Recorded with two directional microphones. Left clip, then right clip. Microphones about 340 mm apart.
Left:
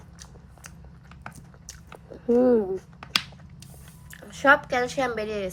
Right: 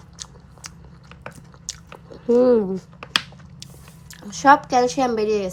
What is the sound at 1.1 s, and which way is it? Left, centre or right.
Biting, centre.